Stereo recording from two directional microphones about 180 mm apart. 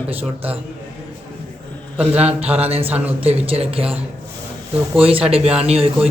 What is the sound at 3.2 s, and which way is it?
Speech, 35° right (ahead or behind).